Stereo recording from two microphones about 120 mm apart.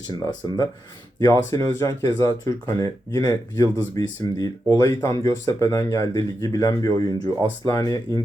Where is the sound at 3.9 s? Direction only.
35° left (ahead or behind).